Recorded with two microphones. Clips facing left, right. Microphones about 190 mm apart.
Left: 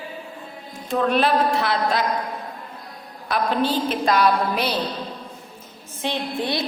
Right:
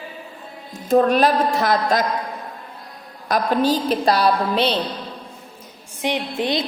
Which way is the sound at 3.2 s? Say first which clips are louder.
Right 3 dB; 40° right (ahead or behind).